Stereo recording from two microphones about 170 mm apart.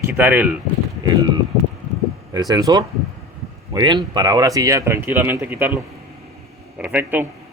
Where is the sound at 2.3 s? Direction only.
20° right (ahead or behind).